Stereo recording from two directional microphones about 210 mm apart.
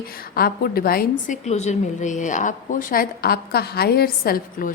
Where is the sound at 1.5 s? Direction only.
35° left (ahead or behind).